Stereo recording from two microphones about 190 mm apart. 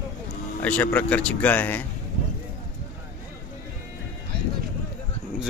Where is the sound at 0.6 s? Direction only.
5° left (ahead or behind).